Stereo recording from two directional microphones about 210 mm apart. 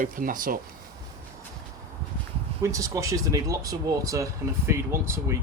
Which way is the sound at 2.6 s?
15° right (ahead or behind).